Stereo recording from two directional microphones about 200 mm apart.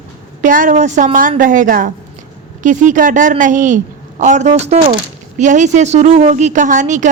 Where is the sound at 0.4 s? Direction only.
40° right (ahead or behind).